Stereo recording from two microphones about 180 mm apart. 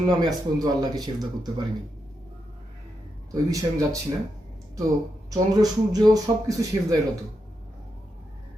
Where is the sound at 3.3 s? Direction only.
20° right (ahead or behind).